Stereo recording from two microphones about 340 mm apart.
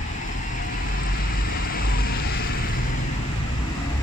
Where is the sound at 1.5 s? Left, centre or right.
Left.